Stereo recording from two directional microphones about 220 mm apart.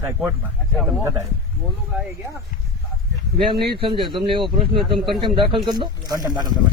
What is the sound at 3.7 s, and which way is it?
Speech, 25° right (ahead or behind).